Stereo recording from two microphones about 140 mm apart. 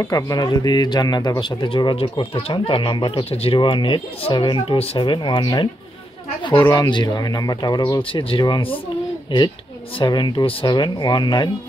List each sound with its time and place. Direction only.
0.0 s speech: 25° left (ahead or behind)
9.9 s speech: 35° left (ahead or behind)